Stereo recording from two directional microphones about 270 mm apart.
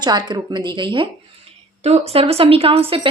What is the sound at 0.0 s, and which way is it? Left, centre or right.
A woman's voice, centre.